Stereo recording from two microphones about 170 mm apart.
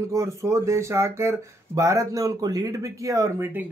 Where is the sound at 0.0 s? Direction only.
15° right (ahead or behind).